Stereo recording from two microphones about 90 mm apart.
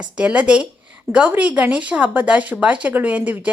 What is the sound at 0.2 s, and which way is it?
Speech, 15° right (ahead or behind).